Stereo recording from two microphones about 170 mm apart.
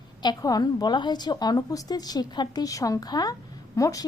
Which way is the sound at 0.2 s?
25° left (ahead or behind).